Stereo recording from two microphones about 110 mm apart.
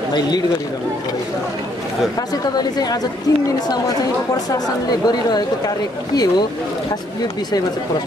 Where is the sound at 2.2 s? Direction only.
35° left (ahead or behind).